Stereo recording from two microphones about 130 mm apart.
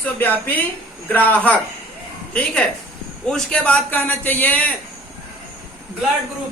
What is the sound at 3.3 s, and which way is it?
A man's voice, 5° left (ahead or behind).